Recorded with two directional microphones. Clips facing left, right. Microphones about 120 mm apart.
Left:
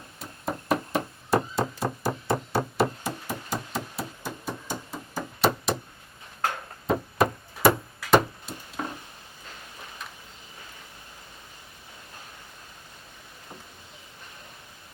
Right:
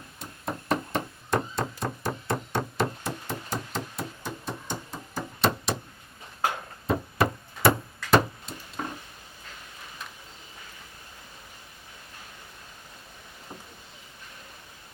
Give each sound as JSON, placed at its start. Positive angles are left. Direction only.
{"t": 0.2, "sound": "knock", "side_deg": 0}
{"t": 6.8, "sound": "knock", "side_deg": 0}
{"t": 8.1, "sound": "a sound", "side_deg": 0}